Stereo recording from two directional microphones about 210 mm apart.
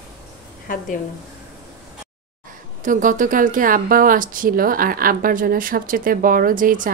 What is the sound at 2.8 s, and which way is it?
Speech, 40° right (ahead or behind).